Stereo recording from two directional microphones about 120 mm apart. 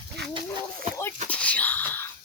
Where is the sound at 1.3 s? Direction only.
10° left (ahead or behind).